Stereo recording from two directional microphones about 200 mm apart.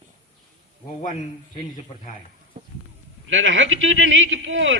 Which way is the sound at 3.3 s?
70° right (ahead or behind).